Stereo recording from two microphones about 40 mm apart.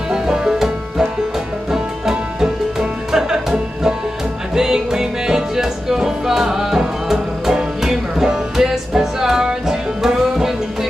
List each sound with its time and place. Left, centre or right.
0.1 s music: centre